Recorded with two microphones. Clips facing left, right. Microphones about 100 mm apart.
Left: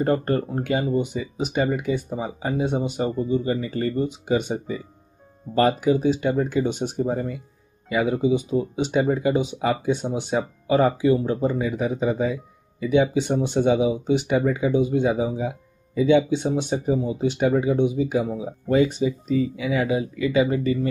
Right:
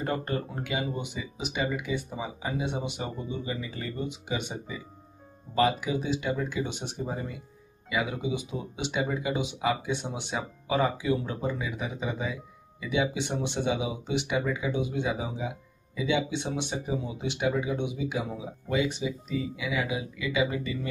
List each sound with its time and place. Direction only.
0.0 s speech: 45° left (ahead or behind)